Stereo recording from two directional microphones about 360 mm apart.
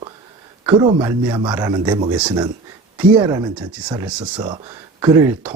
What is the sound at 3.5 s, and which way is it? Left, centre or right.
Speech, centre.